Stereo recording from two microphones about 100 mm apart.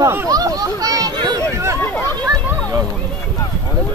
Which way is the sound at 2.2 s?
35° right (ahead or behind).